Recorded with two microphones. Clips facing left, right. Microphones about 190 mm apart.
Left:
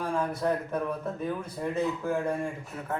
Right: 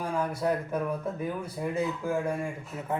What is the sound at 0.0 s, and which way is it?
A man's voice, 10° right (ahead or behind).